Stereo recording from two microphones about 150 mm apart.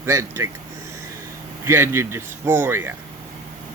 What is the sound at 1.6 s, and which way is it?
Speech, 15° right (ahead or behind).